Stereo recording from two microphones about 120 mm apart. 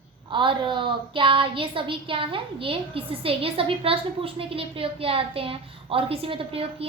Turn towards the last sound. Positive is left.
turn(degrees=-55)  # may be behind; listen again after turning